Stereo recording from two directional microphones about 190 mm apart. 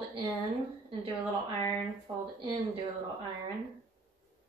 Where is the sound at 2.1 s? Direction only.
25° right (ahead or behind).